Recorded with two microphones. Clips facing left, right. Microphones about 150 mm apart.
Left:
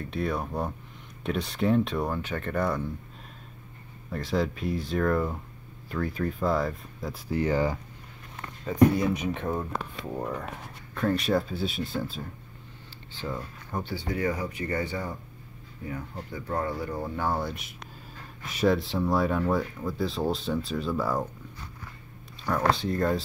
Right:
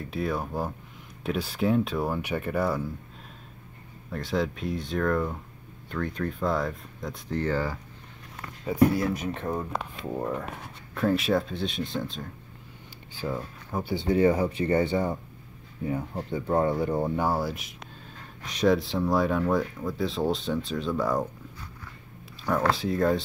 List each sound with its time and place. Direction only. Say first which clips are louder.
0.0 s speech: even; centre (ahead or behind)
4.1 s speech: even; centre (ahead or behind); by 7.8 s 15° left (ahead or behind)
8.4 s speech: left 1 dB; centre (ahead or behind)
11.0 s speech: right 1 dB; centre (ahead or behind)
13.1 s speech: right 3 dB; 10° right (ahead or behind)
13.9 s speech: right 8 dB; 25° right (ahead or behind)
17.3 s speech: right 2 dB; 5° right (ahead or behind)
22.7 s speech: right 1 dB; centre (ahead or behind)